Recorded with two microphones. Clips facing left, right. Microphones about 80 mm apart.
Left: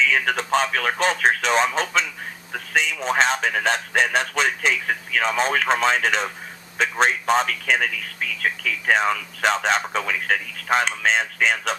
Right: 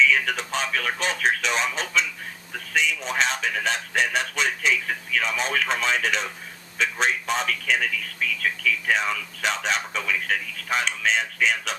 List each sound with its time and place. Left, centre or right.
0.0 s a man's voice: left